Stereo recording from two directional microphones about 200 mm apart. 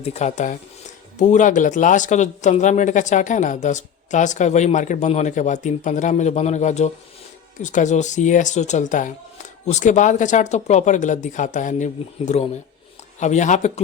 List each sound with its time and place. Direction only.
0.0 s a man's voice: 35° left (ahead or behind)